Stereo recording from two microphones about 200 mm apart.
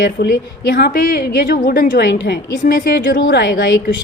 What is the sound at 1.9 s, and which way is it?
A woman's voice, 60° left (ahead or behind).